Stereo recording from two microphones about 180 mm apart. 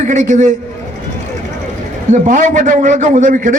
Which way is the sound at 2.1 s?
45° right (ahead or behind).